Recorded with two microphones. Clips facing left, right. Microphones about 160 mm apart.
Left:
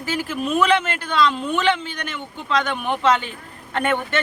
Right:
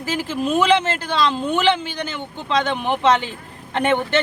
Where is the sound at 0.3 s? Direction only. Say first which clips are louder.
Right 2 dB; 30° right (ahead or behind).